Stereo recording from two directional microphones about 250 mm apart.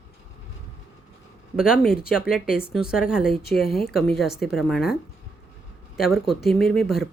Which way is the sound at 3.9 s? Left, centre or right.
Centre.